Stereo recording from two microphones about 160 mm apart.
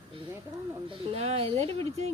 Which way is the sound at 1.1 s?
40° right (ahead or behind).